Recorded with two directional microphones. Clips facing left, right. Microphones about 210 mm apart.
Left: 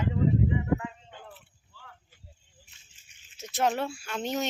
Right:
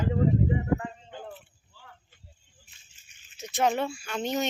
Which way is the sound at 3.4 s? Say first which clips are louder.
Right 2 dB; 5° left (ahead or behind).